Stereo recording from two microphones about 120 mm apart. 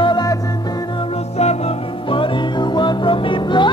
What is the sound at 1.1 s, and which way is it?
Music, 60° left (ahead or behind).